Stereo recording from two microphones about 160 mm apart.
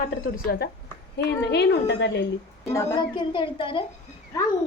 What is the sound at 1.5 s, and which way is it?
Speech, 90° left.